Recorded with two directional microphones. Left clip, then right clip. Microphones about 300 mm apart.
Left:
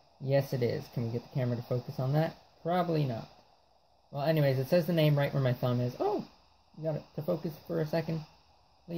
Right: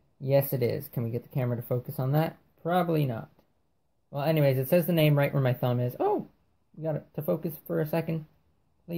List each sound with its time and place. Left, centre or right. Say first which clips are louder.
0.2 s speech: right 4 dB; centre